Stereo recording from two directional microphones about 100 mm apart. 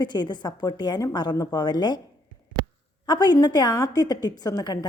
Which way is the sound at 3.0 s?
45° left (ahead or behind).